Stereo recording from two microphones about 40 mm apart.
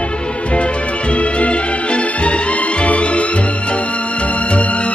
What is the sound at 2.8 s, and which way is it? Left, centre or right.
Music, left.